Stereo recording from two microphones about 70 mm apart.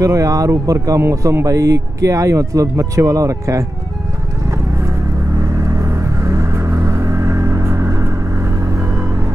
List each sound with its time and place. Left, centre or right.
0.0 s speech: right
5.4 s vehicle: right